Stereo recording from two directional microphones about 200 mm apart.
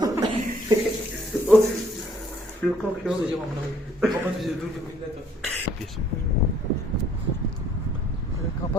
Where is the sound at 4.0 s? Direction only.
Centre (ahead or behind).